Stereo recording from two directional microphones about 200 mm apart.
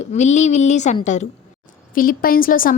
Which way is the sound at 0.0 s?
35° left (ahead or behind).